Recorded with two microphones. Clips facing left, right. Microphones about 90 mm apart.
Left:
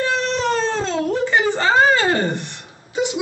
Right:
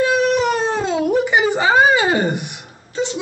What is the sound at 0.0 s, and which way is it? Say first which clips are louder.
Whimper: right 5 dB; 10° right (ahead or behind).